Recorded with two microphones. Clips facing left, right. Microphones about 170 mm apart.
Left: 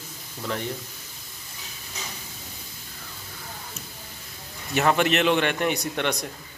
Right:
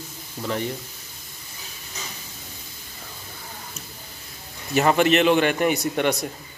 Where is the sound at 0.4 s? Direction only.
5° right (ahead or behind).